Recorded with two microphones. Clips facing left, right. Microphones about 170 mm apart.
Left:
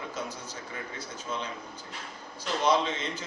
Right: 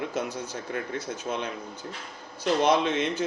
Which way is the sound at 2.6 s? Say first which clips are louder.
Right 1 dB; 60° right (ahead or behind).